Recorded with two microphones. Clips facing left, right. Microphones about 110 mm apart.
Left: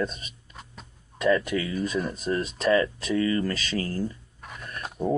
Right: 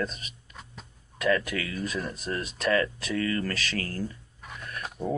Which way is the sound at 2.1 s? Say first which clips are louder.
Left 5 dB; 30° left (ahead or behind).